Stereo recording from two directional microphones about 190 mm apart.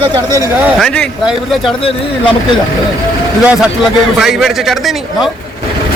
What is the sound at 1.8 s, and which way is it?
Speech, 25° left (ahead or behind).